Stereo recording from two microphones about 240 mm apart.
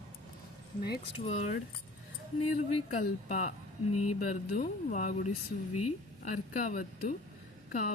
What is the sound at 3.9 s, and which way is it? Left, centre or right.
Speech, left.